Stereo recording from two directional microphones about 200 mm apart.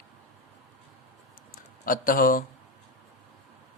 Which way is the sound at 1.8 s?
45° left (ahead or behind).